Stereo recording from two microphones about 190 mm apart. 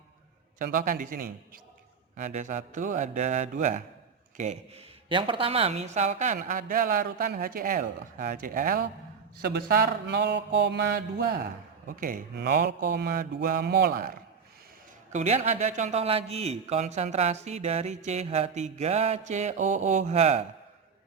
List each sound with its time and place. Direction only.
0.6 s speech: 45° right (ahead or behind)
5.0 s speech: 25° right (ahead or behind); by 8.9 s 50° right (ahead or behind)
9.4 s mantra: 60° right (ahead or behind)
11.9 s speech: 45° right (ahead or behind)
12.4 s mantra: 60° right (ahead or behind)
15.1 s speech: 40° right (ahead or behind)